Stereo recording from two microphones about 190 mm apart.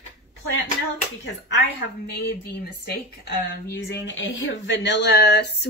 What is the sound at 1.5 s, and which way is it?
Speech, 60° left (ahead or behind).